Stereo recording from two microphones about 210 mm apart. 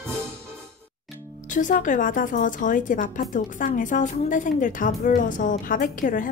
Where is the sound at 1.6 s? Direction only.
40° left (ahead or behind).